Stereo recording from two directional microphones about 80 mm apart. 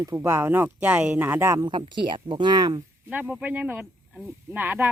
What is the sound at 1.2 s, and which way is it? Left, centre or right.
Speech, right.